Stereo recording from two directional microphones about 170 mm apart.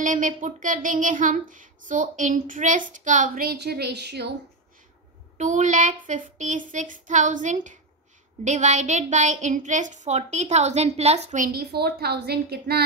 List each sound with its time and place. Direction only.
0.0 s speech: 50° right (ahead or behind); by 4.4 s 75° right (ahead or behind)
5.4 s speech: 45° right (ahead or behind); by 12.8 s 70° right (ahead or behind)